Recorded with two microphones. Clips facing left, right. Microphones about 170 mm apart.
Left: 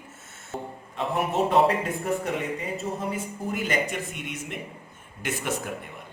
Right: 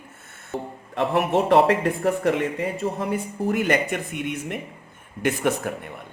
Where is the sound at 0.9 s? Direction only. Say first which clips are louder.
Right 5 dB; 75° right (ahead or behind).